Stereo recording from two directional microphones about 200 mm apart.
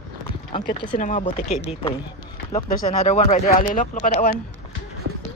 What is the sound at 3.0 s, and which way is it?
Speech, 35° left (ahead or behind).